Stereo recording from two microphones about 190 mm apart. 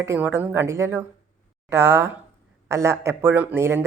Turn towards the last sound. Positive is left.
turn(degrees=-10)  # may be behind; listen again after turning